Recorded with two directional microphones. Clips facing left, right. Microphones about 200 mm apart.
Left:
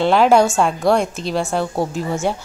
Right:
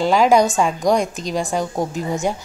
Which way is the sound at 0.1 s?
15° right (ahead or behind).